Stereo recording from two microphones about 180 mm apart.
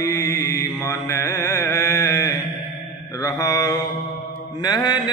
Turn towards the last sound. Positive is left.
turn(degrees=25)  # may be behind; listen again after turning